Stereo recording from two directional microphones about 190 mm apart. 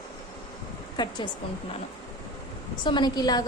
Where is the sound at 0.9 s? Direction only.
25° left (ahead or behind).